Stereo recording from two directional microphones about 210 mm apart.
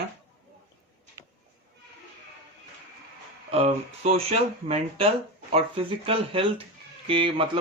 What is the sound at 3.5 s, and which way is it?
Speech, 30° right (ahead or behind).